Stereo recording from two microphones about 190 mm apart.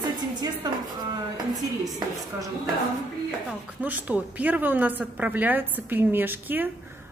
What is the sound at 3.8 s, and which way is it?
A woman's voice, 10° right (ahead or behind).